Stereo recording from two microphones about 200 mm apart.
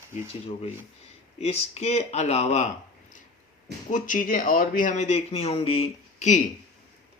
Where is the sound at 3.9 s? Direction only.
40° left (ahead or behind).